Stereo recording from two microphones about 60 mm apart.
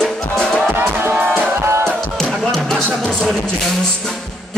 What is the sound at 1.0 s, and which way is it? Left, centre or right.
Music, right.